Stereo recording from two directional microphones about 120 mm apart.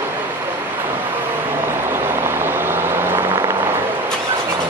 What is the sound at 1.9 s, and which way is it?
Vehicle, 20° right (ahead or behind).